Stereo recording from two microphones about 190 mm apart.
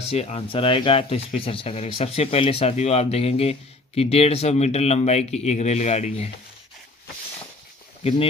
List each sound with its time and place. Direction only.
0.1 s speech: 30° left (ahead or behind)